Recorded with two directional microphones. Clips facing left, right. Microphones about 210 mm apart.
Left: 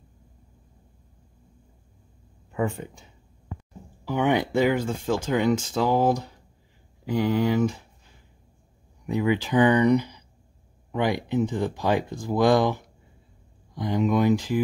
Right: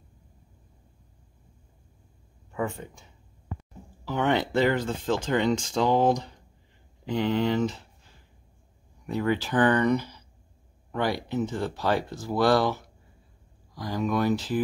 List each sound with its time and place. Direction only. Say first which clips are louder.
2.5 s speech: left 3 dB; 10° left (ahead or behind)
4.0 s speech: left 2 dB; 15° left (ahead or behind)
9.0 s speech: left 3 dB; 15° left (ahead or behind)